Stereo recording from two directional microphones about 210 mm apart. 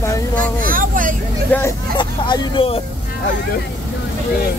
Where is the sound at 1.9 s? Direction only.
20° left (ahead or behind).